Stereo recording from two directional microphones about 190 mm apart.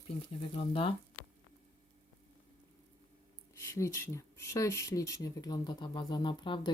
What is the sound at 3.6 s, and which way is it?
Speech, 15° left (ahead or behind).